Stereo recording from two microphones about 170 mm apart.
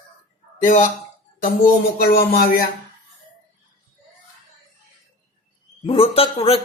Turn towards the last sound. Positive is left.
turn(degrees=35)  # may be behind; listen again after turning